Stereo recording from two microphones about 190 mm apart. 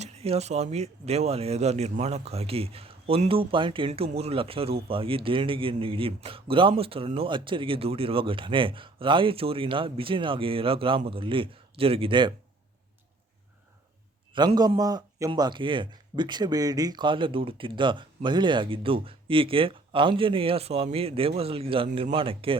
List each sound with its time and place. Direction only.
0.0 s speech: 35° right (ahead or behind)
14.3 s speech: 20° right (ahead or behind)